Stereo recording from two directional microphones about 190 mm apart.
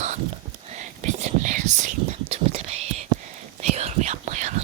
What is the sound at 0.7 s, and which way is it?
Whispering, 40° right (ahead or behind).